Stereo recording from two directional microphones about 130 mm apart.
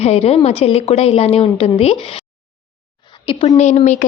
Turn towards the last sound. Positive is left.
turn(degrees=65)  # may be behind; listen again after turning